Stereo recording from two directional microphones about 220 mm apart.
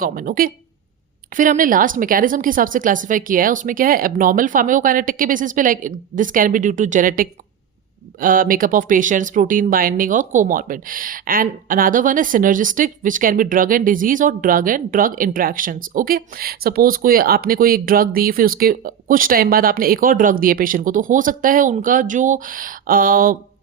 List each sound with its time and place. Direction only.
0.0 s speech: 40° right (ahead or behind)